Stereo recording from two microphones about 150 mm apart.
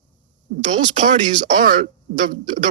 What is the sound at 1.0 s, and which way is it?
Speech, 55° right (ahead or behind).